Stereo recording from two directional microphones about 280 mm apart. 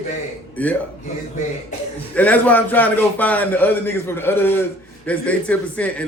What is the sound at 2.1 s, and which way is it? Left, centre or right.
A man's voice, centre.